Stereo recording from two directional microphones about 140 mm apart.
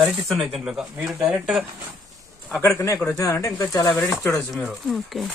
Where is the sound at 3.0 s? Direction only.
20° left (ahead or behind).